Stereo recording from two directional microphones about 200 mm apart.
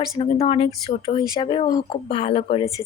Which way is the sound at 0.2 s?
30° left (ahead or behind).